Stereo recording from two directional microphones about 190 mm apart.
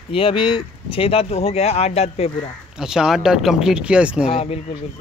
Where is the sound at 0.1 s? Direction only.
30° left (ahead or behind).